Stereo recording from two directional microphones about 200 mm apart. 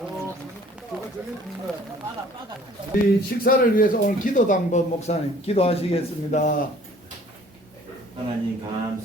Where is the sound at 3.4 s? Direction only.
45° left (ahead or behind).